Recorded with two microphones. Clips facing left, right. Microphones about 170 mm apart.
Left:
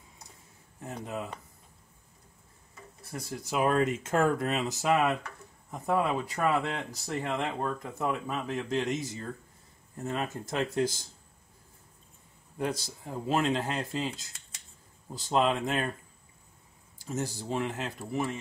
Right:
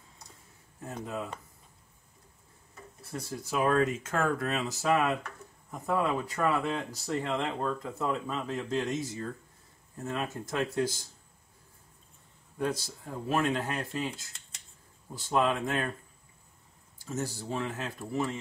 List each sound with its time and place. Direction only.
0.8 s speech: 15° left (ahead or behind)
3.1 s speech: 15° left (ahead or behind)
12.5 s speech: 20° left (ahead or behind)
15.1 s speech: 15° left (ahead or behind)
17.0 s speech: 15° left (ahead or behind)